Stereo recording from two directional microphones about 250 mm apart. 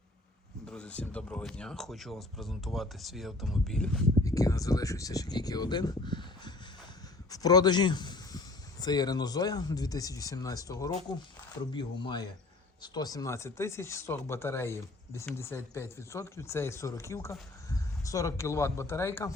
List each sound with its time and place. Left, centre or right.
0.7 s speech: centre
4.2 s a man's voice: centre